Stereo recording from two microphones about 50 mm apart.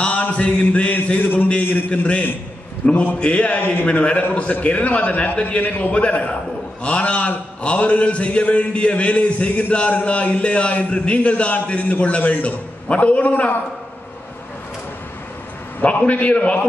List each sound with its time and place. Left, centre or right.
0.0 s mantra: left
0.9 s a sound: left
1.6 s a man's voice: left
1.9 s mantra: left
3.8 s mantra: left
15.8 s mantra: left